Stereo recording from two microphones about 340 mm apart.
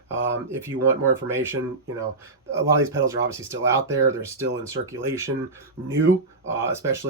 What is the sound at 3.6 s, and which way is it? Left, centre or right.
Speech, centre.